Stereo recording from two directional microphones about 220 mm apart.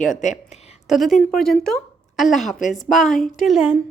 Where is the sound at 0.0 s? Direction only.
35° left (ahead or behind).